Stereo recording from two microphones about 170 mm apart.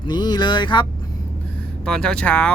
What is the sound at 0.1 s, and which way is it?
Speech, 25° left (ahead or behind).